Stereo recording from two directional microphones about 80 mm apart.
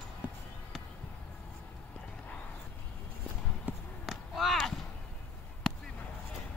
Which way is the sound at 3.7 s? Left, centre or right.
Centre.